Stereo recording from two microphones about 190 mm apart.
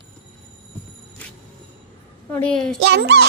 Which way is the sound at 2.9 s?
60° right (ahead or behind).